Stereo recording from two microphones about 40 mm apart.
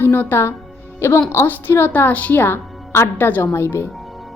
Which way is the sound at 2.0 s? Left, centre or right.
Left.